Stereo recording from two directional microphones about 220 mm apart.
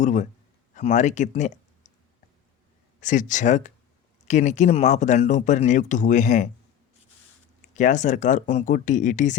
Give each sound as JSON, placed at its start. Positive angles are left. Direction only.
{"t": 0.0, "sound": "speech", "side_deg": 35}
{"t": 3.0, "sound": "speech", "side_deg": 35}
{"t": 7.7, "sound": "speech", "side_deg": 35}